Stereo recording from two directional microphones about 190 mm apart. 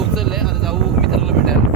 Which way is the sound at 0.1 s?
Centre (ahead or behind).